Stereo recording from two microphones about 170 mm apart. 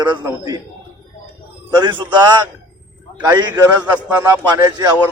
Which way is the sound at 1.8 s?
25° right (ahead or behind).